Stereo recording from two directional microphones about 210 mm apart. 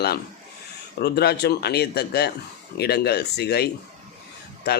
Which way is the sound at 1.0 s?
50° left (ahead or behind).